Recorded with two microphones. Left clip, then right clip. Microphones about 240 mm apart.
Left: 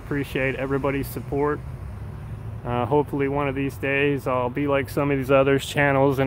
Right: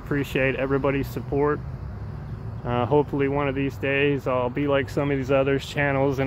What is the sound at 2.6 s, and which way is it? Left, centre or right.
Speech, centre.